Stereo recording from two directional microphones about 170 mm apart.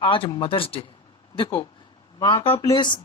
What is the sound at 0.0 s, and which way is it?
Speech, 30° left (ahead or behind).